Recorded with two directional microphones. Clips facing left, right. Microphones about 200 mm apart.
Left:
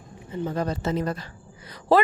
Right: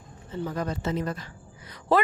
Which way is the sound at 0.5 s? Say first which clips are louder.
Left 3 dB; 35° left (ahead or behind).